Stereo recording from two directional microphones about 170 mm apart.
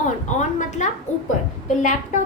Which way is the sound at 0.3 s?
45° left (ahead or behind).